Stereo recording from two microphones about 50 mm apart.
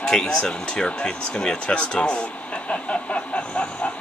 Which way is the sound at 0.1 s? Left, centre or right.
Centre.